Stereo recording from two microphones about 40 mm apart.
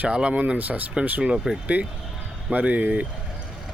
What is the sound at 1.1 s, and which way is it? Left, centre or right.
Speech, right.